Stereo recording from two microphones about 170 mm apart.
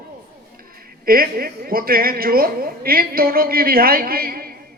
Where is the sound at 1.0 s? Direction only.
60° right (ahead or behind).